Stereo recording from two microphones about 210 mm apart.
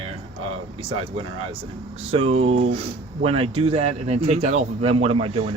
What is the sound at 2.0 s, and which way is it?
Speech, 30° right (ahead or behind).